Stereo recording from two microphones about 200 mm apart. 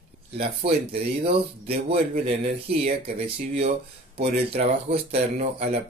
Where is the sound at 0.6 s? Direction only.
30° right (ahead or behind).